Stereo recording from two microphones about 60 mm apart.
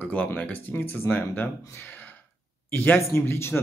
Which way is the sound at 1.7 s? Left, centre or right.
Left.